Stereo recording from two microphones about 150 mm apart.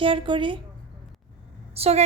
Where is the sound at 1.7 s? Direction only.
45° right (ahead or behind).